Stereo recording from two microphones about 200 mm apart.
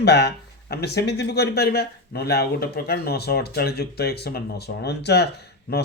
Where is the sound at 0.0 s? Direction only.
55° left (ahead or behind).